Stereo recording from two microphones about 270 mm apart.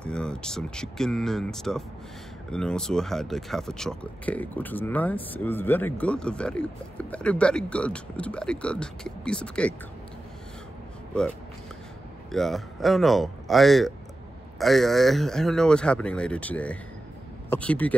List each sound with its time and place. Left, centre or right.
0.0 s speech: centre
12.3 s speech: centre